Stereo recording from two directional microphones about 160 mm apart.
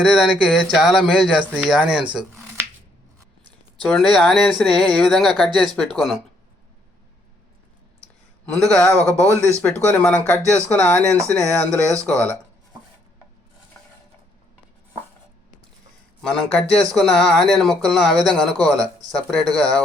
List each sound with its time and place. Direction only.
0.0 s speech: centre (ahead or behind)
3.8 s speech: 5° left (ahead or behind)
8.5 s speech: 5° left (ahead or behind)
16.2 s speech: 5° left (ahead or behind)
19.3 s speech: 5° left (ahead or behind)